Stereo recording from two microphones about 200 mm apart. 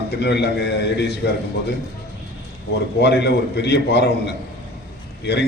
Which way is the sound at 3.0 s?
55° left (ahead or behind).